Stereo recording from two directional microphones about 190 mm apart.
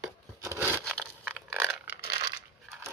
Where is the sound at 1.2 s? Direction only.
10° right (ahead or behind).